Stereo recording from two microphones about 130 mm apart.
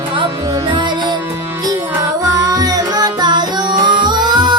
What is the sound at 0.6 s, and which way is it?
Music, 35° right (ahead or behind).